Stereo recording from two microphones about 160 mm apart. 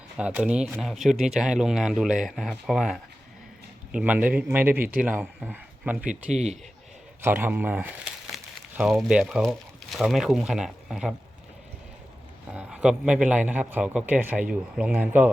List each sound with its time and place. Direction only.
0.2 s speech: 5° right (ahead or behind)
6.3 s a man's voice: 45° right (ahead or behind)
7.2 s speech: 15° right (ahead or behind)
12.5 s speech: 5° right (ahead or behind)